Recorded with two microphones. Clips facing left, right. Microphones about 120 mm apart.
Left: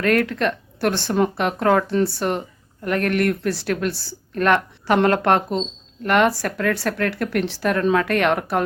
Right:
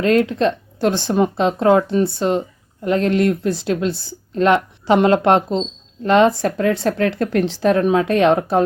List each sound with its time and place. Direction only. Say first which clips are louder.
0.0 s a woman's voice: right 4 dB; 20° right (ahead or behind)